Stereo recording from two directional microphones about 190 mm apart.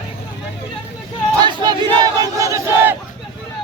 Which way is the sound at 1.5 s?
25° right (ahead or behind).